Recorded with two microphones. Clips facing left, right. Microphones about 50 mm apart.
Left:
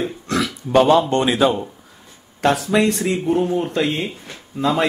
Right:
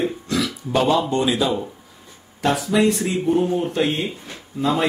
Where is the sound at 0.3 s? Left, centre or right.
Left.